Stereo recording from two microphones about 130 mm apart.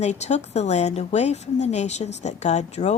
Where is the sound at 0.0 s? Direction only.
60° left (ahead or behind).